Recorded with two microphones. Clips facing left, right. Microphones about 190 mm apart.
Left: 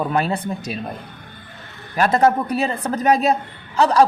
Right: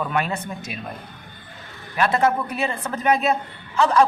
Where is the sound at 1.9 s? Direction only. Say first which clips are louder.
Left 4 dB; 40° left (ahead or behind).